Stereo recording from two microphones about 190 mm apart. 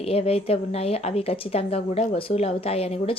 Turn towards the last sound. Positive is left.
turn(degrees=30)  # may be behind; listen again after turning